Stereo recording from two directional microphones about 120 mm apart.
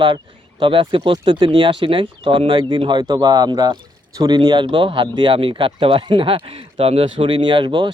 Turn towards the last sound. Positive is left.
turn(degrees=-40)  # may be behind; listen again after turning